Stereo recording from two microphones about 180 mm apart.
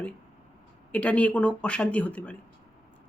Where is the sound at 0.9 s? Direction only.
5° left (ahead or behind).